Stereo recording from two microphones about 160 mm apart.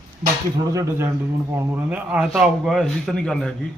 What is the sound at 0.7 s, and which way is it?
Speech, 20° right (ahead or behind).